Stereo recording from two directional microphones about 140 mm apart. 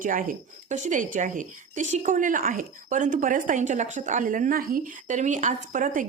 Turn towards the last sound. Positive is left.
turn(degrees=-65)  # may be behind; listen again after turning